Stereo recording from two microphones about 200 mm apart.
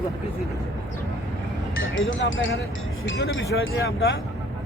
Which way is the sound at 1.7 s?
75° left (ahead or behind).